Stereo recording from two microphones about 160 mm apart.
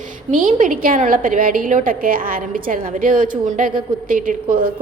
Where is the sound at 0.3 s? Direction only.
55° right (ahead or behind).